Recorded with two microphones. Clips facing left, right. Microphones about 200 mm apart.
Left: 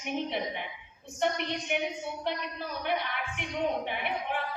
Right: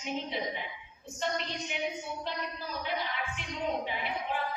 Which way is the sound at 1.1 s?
60° left (ahead or behind).